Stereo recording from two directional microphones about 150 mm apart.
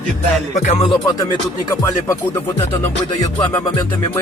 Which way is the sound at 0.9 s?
30° left (ahead or behind).